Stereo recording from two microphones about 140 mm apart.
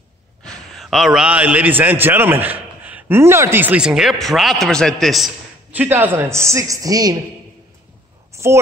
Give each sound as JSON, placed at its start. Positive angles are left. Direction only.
{"t": 0.4, "sound": "a man's voice", "side_deg": 5}
{"t": 5.7, "sound": "a man's voice", "side_deg": -15}
{"t": 8.3, "sound": "a sound", "side_deg": -20}